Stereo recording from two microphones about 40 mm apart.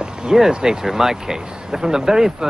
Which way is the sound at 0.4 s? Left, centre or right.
Centre.